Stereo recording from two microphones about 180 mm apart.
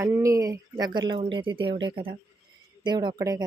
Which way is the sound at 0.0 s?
15° right (ahead or behind).